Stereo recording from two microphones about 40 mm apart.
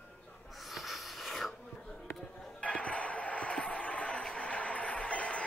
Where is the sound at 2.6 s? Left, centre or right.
Left.